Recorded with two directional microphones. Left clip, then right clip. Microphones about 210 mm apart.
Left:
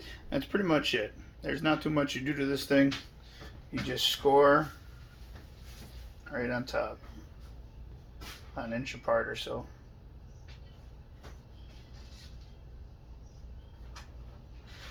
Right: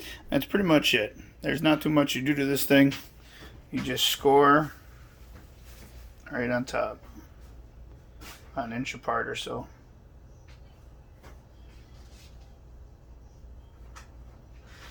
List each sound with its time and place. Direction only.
0.0 s speech: 45° right (ahead or behind)
3.8 s speech: 35° right (ahead or behind)
6.3 s speech: 40° right (ahead or behind)
8.5 s speech: 35° right (ahead or behind)